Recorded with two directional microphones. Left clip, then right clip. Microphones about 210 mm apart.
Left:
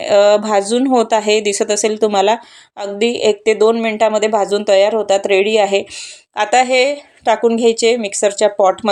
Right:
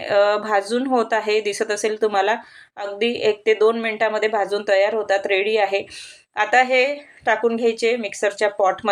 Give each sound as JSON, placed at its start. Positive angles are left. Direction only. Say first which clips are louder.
{"t": 0.0, "sound": "speech", "louder": "left 7 dB", "side_deg": 30}